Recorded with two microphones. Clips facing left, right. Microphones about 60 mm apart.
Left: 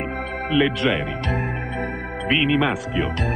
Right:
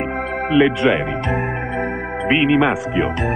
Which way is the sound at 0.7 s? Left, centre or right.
Centre.